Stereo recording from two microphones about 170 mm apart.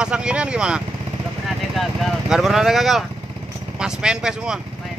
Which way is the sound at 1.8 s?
Centre (ahead or behind).